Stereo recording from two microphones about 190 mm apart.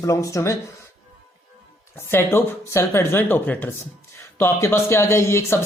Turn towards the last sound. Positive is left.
turn(degrees=15)  # may be behind; listen again after turning